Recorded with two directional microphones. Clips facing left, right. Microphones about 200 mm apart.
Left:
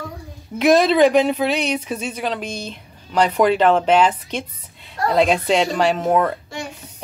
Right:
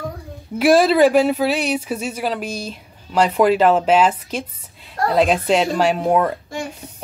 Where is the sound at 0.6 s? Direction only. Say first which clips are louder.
Right 1 dB; 5° right (ahead or behind).